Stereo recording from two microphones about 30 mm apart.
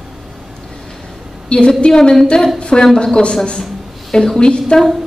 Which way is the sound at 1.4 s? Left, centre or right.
Left.